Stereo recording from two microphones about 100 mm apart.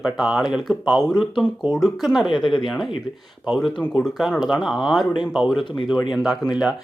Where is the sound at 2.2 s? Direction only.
55° left (ahead or behind).